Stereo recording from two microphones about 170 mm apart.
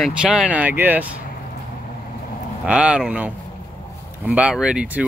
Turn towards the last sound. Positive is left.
turn(degrees=-5)  # may be behind; listen again after turning